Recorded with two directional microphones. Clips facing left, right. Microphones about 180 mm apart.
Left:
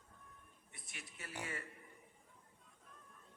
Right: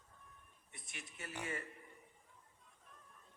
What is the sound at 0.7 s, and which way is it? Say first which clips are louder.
Speech: right 2 dB; 25° right (ahead or behind).